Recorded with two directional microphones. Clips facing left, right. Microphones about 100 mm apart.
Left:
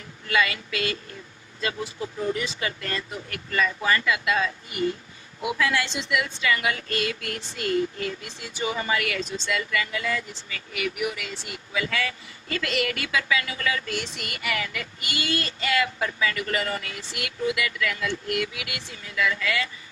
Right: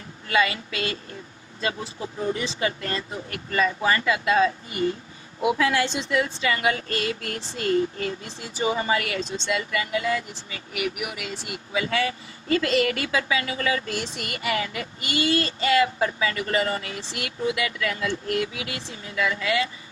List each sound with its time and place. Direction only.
0.3 s a woman's voice: 25° right (ahead or behind)